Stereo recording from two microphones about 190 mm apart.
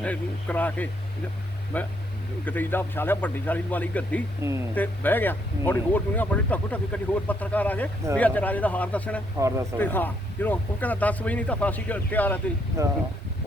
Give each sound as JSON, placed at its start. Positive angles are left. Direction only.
{"t": 0.0, "sound": "speech", "side_deg": 5}
{"t": 12.8, "sound": "speech", "side_deg": -15}